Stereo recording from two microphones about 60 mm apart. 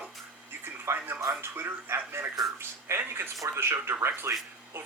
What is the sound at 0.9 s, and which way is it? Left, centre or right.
Speech, right.